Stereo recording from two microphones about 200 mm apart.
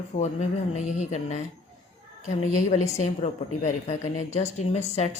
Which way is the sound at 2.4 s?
35° left (ahead or behind).